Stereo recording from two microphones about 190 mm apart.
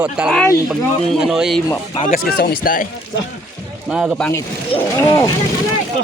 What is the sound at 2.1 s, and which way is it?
Speech, 50° left (ahead or behind).